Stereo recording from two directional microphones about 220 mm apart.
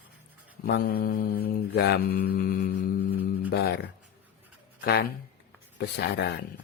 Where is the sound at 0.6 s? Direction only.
45° left (ahead or behind).